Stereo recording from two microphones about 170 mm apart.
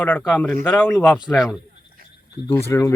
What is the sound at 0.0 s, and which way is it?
Speech, 10° left (ahead or behind).